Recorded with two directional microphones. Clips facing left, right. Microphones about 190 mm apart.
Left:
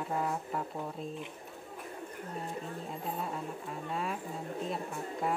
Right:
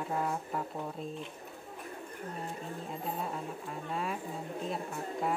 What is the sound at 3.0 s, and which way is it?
A woman's voice, centre (ahead or behind).